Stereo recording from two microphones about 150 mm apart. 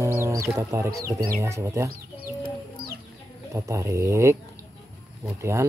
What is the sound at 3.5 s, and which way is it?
Speech, 20° right (ahead or behind).